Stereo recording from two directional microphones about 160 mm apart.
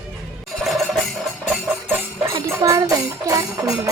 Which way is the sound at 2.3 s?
20° right (ahead or behind).